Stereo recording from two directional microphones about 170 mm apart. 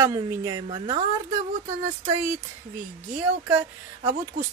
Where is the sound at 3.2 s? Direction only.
10° right (ahead or behind).